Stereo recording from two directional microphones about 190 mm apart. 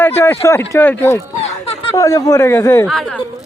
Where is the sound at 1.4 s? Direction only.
30° left (ahead or behind).